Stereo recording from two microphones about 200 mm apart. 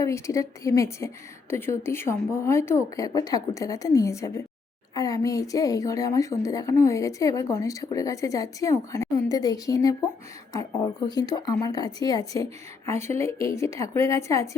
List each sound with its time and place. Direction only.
0.0 s a woman's voice: 15° left (ahead or behind)